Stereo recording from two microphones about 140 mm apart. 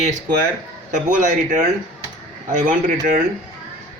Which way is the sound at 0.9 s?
70° right (ahead or behind).